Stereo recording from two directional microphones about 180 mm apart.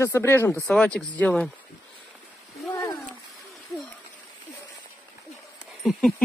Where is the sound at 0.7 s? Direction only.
5° left (ahead or behind).